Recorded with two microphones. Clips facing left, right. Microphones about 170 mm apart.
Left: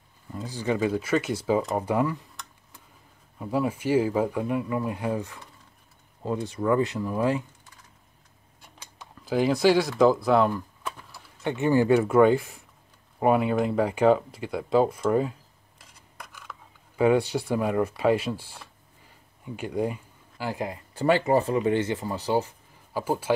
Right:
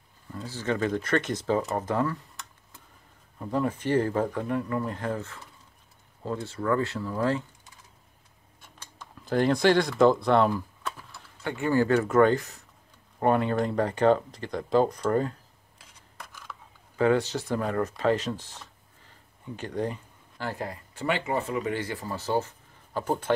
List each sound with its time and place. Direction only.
0.3 s speech: 15° left (ahead or behind)
3.3 s speech: 10° left (ahead or behind)
9.2 s speech: 5° left (ahead or behind)
11.4 s speech: 20° left (ahead or behind)
16.2 s a sound: centre (ahead or behind)
16.9 s speech: 10° left (ahead or behind)
20.9 s speech: 35° left (ahead or behind); by 23.3 s 5° left (ahead or behind)